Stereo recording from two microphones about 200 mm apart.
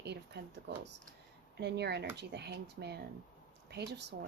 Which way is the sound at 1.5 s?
55° right (ahead or behind).